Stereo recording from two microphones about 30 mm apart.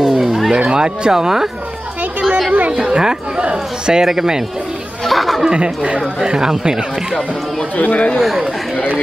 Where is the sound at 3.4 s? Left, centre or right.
Right.